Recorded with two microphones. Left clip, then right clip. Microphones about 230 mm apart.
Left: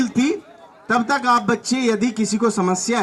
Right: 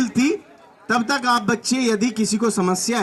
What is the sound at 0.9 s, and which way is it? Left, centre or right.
Speech, right.